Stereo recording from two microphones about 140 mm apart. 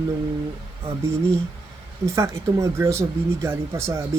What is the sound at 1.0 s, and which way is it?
Speech, 20° right (ahead or behind).